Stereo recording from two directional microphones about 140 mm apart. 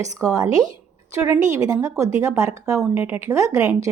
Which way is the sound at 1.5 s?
20° right (ahead or behind).